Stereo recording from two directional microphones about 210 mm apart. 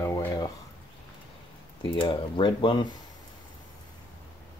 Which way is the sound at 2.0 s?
25° left (ahead or behind).